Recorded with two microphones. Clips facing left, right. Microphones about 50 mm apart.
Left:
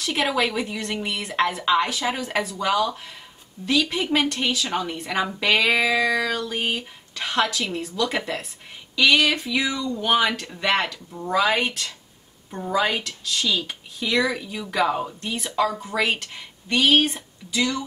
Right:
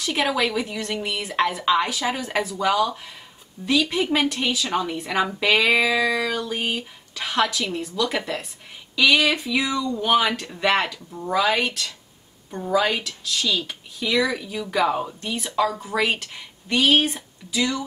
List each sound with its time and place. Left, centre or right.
0.0 s speech: centre
11.5 s speech: centre